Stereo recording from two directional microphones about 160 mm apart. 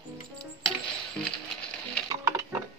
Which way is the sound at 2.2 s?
20° right (ahead or behind).